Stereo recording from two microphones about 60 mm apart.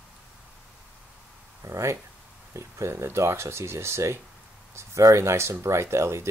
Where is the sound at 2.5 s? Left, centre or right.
Right.